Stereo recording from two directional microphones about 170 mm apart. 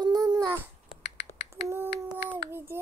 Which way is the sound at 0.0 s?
25° right (ahead or behind).